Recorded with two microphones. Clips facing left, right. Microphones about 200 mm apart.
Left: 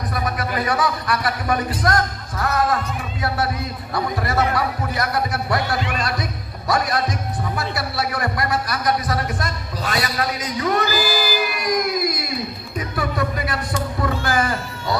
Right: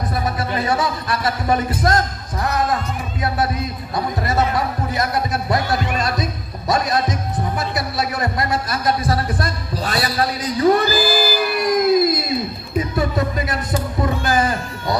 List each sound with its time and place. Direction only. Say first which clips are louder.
0.1 s a man's voice: even; 25° right (ahead or behind)
6.0 s music: right 3 dB; 20° right (ahead or behind)
6.7 s a man's voice: right 2 dB; 20° right (ahead or behind)
7.5 s a sound: right 1 dB; 20° right (ahead or behind)